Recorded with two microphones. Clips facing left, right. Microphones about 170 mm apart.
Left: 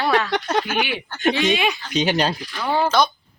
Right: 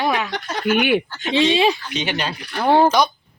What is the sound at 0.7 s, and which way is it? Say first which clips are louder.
Speech: right 7 dB; 55° right (ahead or behind).